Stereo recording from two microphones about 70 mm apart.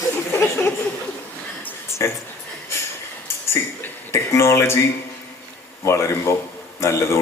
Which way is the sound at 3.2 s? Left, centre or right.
Left.